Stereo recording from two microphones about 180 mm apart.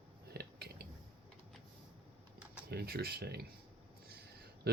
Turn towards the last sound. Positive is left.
turn(degrees=-65)  # may be behind; listen again after turning